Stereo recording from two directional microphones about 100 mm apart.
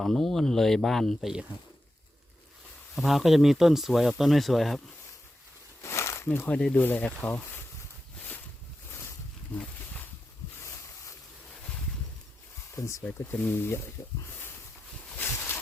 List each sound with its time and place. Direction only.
0.0 s speech: 5° left (ahead or behind)
2.9 s speech: centre (ahead or behind)
5.8 s a sound: 30° left (ahead or behind)
6.3 s speech: 15° left (ahead or behind)
8.9 s boat: 25° left (ahead or behind)
9.6 s a sound: 15° left (ahead or behind)
10.6 s a sound: 30° left (ahead or behind)
12.7 s speech: 30° left (ahead or behind)
15.1 s boat: 20° left (ahead or behind)